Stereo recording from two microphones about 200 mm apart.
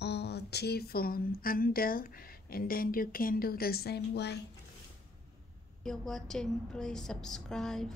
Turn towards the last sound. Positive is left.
turn(degrees=0)  # may be behind; listen again after turning